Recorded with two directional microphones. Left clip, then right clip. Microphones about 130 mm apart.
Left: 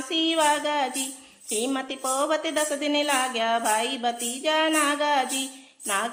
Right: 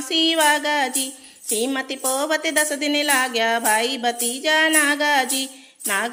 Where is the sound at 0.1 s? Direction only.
30° right (ahead or behind).